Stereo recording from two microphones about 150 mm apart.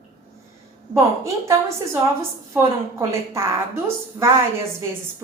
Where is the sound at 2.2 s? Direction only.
20° right (ahead or behind).